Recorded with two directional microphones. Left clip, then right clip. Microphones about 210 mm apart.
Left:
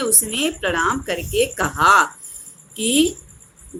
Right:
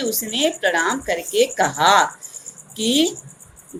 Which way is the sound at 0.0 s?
30° left (ahead or behind).